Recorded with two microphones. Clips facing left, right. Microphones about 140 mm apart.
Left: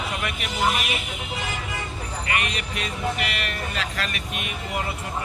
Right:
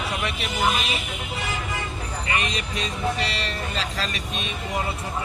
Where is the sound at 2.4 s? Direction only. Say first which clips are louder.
Right 1 dB; 30° right (ahead or behind).